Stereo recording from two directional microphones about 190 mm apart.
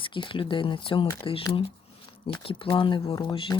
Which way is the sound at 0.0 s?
25° left (ahead or behind).